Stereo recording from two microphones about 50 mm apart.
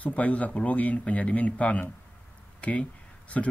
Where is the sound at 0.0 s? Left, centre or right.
Left.